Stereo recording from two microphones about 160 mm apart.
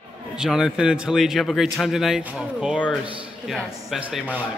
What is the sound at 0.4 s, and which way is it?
Speech, centre (ahead or behind).